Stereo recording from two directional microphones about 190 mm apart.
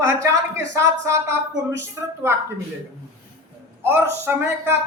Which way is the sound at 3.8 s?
10° right (ahead or behind).